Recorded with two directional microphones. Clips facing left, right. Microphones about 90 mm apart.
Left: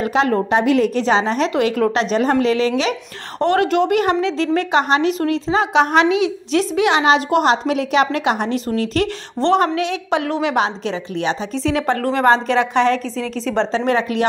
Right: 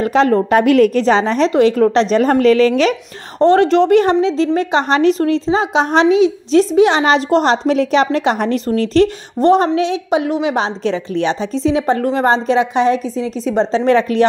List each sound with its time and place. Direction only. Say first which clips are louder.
0.0 s a woman's voice: right 4 dB; 35° right (ahead or behind)
0.5 s a woman's voice: right 5 dB; 55° right (ahead or behind)
1.0 s a woman's voice: right 4 dB; 40° right (ahead or behind)
3.3 s a woman's voice: right 5 dB; 25° right (ahead or behind)
4.8 s a woman's voice: right 4 dB; 35° right (ahead or behind)
9.4 s a woman's voice: right 4 dB; 20° right (ahead or behind)
11.6 s a woman's voice: right 4 dB; 20° right (ahead or behind)